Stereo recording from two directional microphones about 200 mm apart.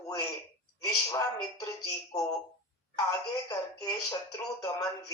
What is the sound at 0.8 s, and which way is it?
Speech, 15° left (ahead or behind).